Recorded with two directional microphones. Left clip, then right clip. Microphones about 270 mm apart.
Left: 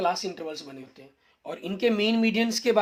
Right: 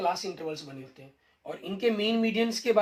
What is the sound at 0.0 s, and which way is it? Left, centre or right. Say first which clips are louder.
Speech: left 2 dB; left.